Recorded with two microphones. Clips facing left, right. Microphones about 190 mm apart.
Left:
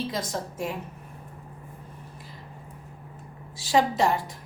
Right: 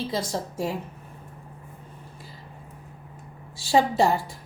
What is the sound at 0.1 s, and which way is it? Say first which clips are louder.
Speech: right 2 dB; 30° right (ahead or behind).